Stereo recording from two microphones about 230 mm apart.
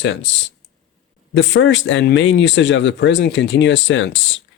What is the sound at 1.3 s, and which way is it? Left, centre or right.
Speech, left.